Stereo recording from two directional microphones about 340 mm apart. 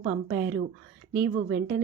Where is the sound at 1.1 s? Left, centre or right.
Right.